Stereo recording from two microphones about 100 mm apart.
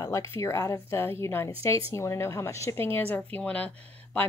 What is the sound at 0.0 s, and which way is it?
Speech, 30° left (ahead or behind).